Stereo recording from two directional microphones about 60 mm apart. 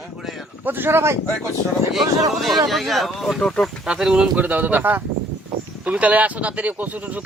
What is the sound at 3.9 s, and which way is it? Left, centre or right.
Speech, centre.